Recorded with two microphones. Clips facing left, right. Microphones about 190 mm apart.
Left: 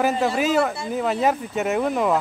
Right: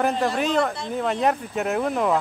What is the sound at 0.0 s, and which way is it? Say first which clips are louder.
Speech: left 2 dB; 5° left (ahead or behind).